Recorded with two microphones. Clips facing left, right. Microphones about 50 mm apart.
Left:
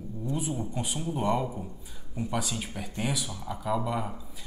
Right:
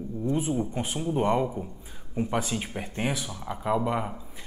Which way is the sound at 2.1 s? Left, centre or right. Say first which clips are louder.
Right 4 dB; right.